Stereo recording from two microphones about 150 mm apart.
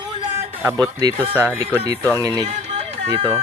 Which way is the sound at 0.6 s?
25° right (ahead or behind).